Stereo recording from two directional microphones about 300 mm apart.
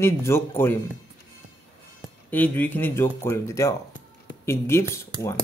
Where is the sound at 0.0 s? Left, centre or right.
Centre.